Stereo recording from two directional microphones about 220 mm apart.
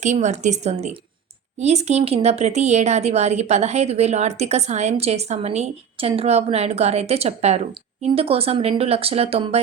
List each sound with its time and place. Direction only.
0.0 s a woman's voice: 30° right (ahead or behind)